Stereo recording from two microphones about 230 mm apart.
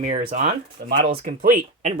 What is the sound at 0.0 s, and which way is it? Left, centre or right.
Speech, right.